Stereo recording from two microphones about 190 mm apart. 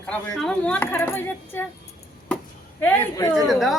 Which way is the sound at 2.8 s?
10° left (ahead or behind).